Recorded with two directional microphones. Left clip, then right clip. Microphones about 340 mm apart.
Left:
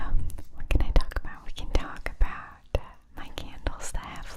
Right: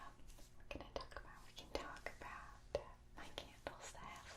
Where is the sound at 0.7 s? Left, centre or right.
Left.